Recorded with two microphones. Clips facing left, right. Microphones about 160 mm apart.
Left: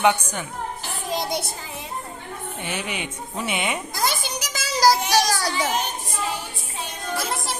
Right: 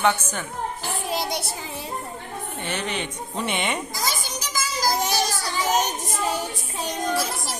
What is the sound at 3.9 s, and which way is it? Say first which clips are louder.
Children playing: left 3 dB; 60° left (ahead or behind).